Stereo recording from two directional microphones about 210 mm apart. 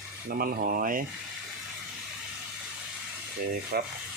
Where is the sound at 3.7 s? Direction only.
50° right (ahead or behind).